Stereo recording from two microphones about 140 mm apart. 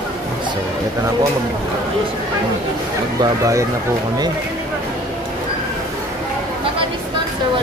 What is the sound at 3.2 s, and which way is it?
Speech, 25° right (ahead or behind).